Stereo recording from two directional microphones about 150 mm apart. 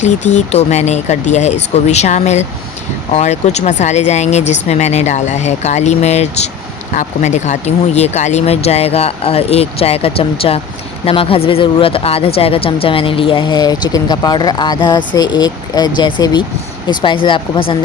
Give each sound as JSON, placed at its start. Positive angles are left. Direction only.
{"t": 0.0, "sound": "speech", "side_deg": 50}